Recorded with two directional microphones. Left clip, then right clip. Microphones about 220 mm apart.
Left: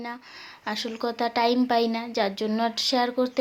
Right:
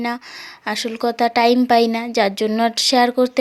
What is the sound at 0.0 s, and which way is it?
A woman's voice, 40° right (ahead or behind).